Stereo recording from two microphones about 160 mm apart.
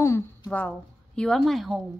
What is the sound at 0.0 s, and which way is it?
A woman's voice, 20° left (ahead or behind).